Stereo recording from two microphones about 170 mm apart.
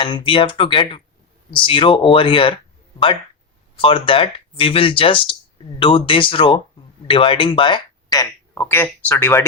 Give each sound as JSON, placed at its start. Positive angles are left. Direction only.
{"t": 0.0, "sound": "speech", "side_deg": 30}
{"t": 3.8, "sound": "speech", "side_deg": 30}